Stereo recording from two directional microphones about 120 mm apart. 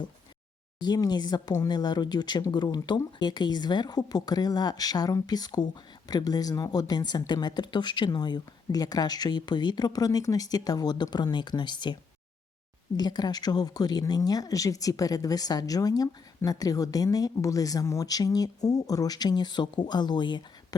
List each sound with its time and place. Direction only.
0.8 s speech: 35° left (ahead or behind)
13.0 s speech: 35° left (ahead or behind)